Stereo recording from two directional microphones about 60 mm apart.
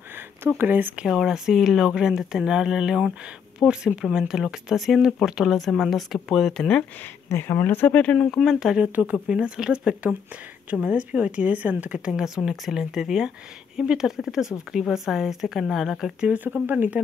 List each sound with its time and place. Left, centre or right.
0.6 s speech: right
1.0 s speech: centre
7.3 s speech: left; by 8.4 s centre
8.4 s speech: centre; by 12.0 s right
12.0 s speech: centre
16.6 s speech: right